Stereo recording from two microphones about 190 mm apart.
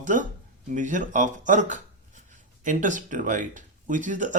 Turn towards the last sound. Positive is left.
turn(degrees=-40)  # may be behind; listen again after turning